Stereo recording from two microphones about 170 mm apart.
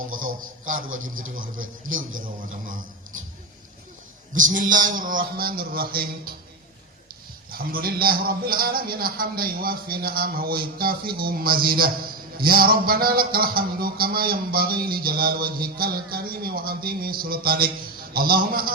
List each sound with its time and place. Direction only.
0.0 s speech: 55° right (ahead or behind)
4.4 s speech: 50° right (ahead or behind)
7.5 s a sound: 60° right (ahead or behind)